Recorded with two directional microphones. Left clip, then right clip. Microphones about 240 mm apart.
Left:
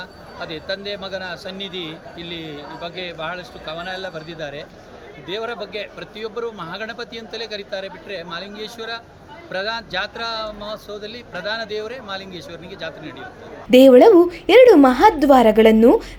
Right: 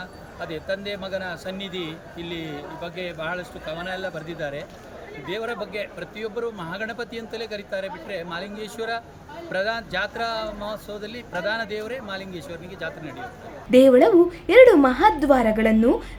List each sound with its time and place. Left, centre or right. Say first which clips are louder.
0.3 s a man's voice: left 2 dB; centre
13.7 s a woman's voice: left 5 dB; centre